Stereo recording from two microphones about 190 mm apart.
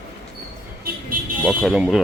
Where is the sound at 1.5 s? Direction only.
5° right (ahead or behind).